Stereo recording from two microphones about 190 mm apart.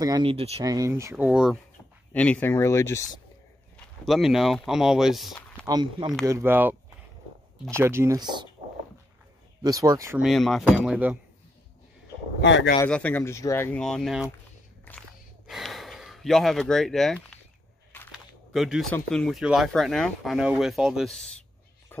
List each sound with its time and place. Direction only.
0.0 s speech: 25° right (ahead or behind)
0.7 s speech: 15° right (ahead or behind)
2.1 s speech: 5° left (ahead or behind)
3.7 s speech: centre (ahead or behind)
5.7 s speech: 20° right (ahead or behind)
9.6 s speech: 20° right (ahead or behind)
10.2 s speech: centre (ahead or behind)
12.4 s speech: 65° left (ahead or behind)
12.8 s speech: 10° left (ahead or behind)
14.9 s gasp: centre (ahead or behind)
18.1 s a sound: centre (ahead or behind)
18.9 s speech: 5° left (ahead or behind)